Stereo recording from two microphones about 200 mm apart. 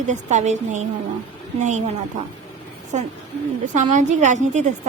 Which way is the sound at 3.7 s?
35° right (ahead or behind).